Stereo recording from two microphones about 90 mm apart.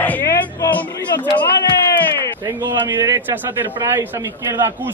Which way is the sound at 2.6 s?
35° right (ahead or behind).